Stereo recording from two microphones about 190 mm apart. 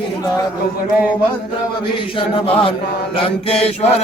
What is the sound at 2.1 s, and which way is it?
Chant, 25° left (ahead or behind).